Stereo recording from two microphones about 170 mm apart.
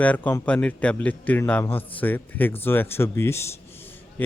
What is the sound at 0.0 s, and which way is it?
A man's voice, 10° left (ahead or behind).